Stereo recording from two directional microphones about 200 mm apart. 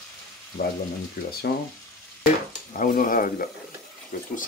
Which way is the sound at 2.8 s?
45° left (ahead or behind).